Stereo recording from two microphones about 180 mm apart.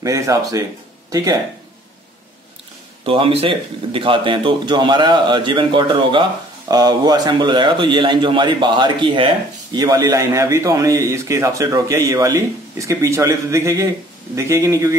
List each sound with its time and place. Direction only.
0.0 s speech: 20° right (ahead or behind)
3.0 s a man's voice: 30° right (ahead or behind)